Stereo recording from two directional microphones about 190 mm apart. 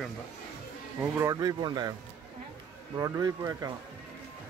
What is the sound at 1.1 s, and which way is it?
Speech, 15° right (ahead or behind).